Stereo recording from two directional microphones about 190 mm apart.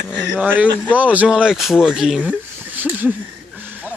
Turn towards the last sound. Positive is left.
turn(degrees=-10)  # may be behind; listen again after turning